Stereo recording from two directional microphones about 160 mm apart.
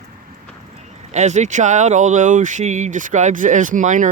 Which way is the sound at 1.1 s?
45° right (ahead or behind).